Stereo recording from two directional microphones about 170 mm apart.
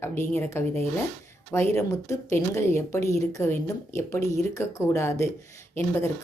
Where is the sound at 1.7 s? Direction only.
15° left (ahead or behind).